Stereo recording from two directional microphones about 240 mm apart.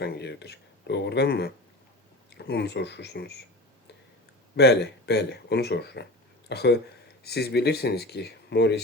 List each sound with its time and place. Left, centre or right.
0.0 s speech: left
4.5 s speech: left